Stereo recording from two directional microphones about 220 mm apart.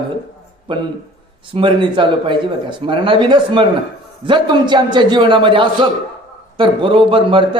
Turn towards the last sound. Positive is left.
turn(degrees=-25)  # may be behind; listen again after turning